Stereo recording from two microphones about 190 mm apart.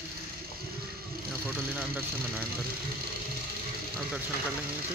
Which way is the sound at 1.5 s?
10° right (ahead or behind).